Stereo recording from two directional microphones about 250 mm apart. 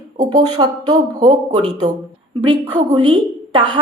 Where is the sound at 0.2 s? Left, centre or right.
Centre.